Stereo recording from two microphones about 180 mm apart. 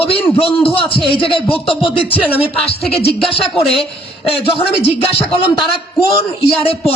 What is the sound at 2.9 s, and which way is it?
A man's voice, 35° left (ahead or behind).